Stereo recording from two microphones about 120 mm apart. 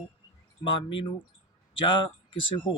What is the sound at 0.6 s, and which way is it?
Speech, 40° left (ahead or behind).